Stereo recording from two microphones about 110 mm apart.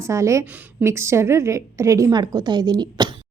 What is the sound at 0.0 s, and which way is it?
Speech, 30° right (ahead or behind).